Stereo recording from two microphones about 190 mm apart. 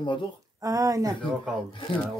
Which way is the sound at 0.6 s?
15° right (ahead or behind).